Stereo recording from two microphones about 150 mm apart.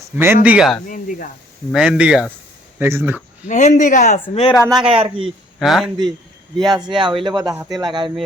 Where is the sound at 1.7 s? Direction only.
5° right (ahead or behind).